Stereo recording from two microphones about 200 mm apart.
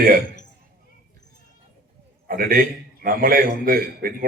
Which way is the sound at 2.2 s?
45° right (ahead or behind).